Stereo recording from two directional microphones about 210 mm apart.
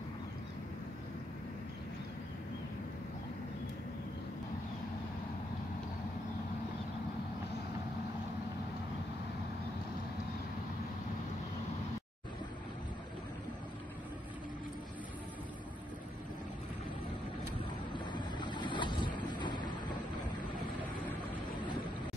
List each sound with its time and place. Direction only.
17.9 s boat: 20° left (ahead or behind)
19.1 s vehicle: 20° left (ahead or behind)